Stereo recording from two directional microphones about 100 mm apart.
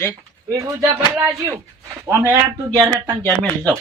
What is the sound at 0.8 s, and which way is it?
Speech, 20° right (ahead or behind).